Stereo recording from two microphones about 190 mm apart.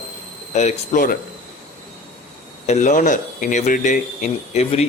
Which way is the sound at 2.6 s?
40° left (ahead or behind).